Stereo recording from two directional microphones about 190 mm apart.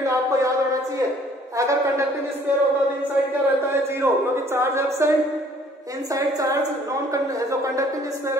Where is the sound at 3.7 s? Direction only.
10° right (ahead or behind).